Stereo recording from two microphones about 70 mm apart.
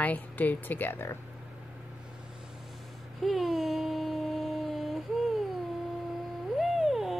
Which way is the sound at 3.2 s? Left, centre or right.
Centre.